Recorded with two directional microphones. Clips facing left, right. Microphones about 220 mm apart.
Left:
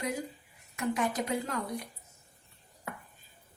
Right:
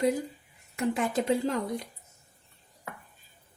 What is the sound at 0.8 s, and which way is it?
Speech, 30° right (ahead or behind).